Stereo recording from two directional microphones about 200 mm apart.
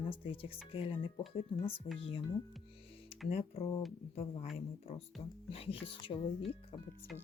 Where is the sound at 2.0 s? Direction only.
30° left (ahead or behind).